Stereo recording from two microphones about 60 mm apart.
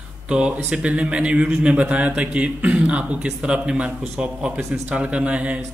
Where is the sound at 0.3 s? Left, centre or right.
Centre.